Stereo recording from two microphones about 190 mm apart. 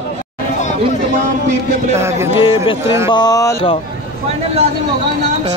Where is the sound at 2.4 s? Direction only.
25° left (ahead or behind).